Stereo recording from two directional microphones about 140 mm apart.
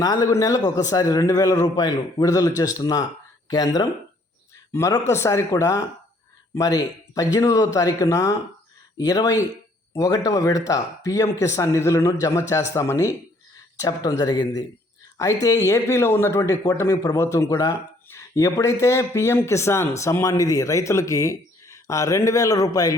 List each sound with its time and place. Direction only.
0.0 s a man's voice: 25° left (ahead or behind)